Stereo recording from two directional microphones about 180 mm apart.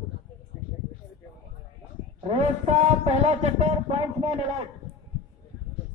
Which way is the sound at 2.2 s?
35° right (ahead or behind).